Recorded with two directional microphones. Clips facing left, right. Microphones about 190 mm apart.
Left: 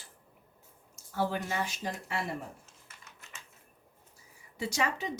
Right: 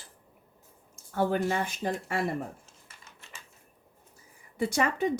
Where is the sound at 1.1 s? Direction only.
55° right (ahead or behind).